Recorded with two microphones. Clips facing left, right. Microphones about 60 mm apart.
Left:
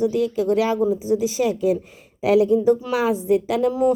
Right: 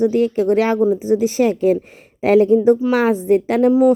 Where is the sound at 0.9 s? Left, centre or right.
Right.